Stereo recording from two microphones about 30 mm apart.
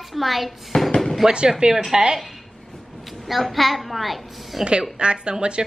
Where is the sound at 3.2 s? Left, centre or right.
Centre.